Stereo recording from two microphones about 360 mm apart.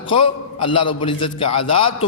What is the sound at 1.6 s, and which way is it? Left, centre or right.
Speech, left.